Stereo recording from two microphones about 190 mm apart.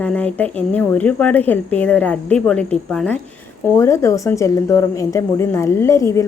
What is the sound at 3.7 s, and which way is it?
A woman's voice, 15° left (ahead or behind).